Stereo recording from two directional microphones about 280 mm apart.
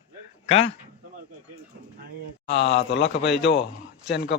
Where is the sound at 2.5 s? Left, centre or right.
Left.